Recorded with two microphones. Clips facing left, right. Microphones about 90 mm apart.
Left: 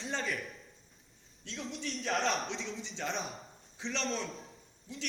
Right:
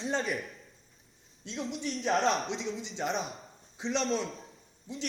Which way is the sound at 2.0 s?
35° right (ahead or behind).